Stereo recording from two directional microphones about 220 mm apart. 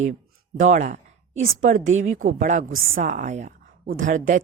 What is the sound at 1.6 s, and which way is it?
Speech, 35° right (ahead or behind).